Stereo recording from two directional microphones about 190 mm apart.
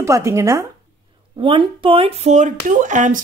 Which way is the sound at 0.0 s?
15° right (ahead or behind).